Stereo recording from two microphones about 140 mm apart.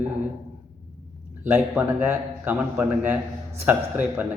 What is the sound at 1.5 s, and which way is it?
Speech, 15° right (ahead or behind).